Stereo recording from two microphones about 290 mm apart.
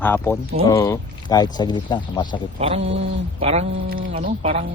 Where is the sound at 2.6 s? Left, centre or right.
Right.